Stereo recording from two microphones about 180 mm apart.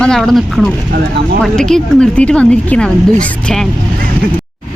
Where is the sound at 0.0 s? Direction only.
5° left (ahead or behind).